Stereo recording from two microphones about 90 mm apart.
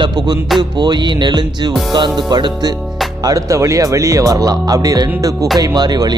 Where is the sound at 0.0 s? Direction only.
55° right (ahead or behind).